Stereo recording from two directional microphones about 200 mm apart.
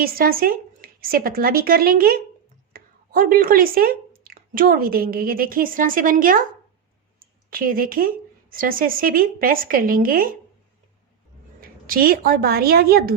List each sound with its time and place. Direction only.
0.0 s a woman's voice: 45° right (ahead or behind)
11.6 s a woman's voice: 45° right (ahead or behind)